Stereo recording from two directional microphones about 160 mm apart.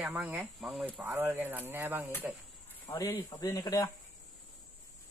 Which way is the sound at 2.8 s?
15° left (ahead or behind).